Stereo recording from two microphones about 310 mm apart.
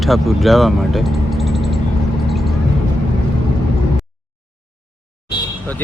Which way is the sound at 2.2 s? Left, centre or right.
Centre.